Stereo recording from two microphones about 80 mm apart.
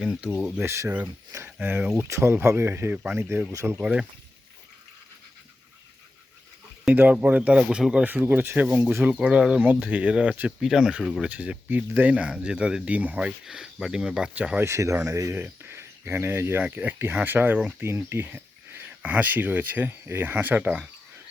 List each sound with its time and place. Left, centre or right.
0.0 s speech: centre
0.6 s speech: right
1.6 s speech: right
2.0 s speech: right
3.5 s speech: right
6.9 s speech: right
8.0 s speech: right
10.6 s speech: centre
14.6 s speech: right
15.4 s speech: right